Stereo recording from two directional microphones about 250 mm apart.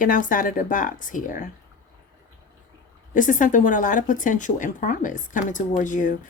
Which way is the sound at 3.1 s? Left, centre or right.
Left.